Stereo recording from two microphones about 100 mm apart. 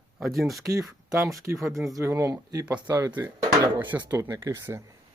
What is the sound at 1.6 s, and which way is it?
Speech, 30° right (ahead or behind).